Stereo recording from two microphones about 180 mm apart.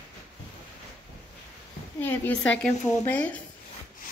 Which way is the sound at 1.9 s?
10° left (ahead or behind).